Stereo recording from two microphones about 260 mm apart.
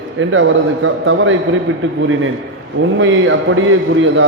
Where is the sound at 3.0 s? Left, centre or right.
Right.